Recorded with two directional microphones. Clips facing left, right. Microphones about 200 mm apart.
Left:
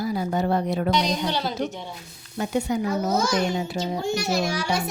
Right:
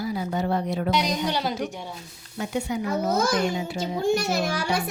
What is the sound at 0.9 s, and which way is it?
Speech, 10° right (ahead or behind).